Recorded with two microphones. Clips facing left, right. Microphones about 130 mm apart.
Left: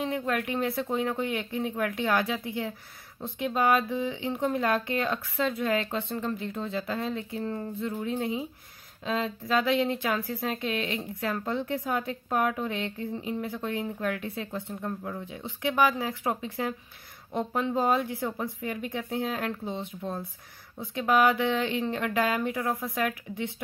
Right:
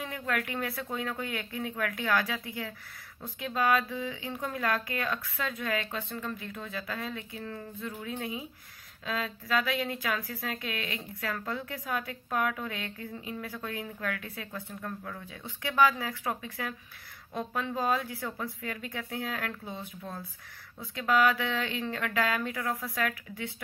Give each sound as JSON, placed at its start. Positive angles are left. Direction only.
{"t": 0.0, "sound": "speech", "side_deg": 25}